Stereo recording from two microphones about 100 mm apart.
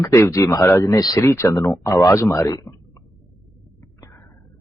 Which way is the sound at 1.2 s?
30° left (ahead or behind).